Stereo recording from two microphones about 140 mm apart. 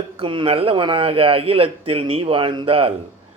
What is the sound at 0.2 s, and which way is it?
Speech, 40° right (ahead or behind).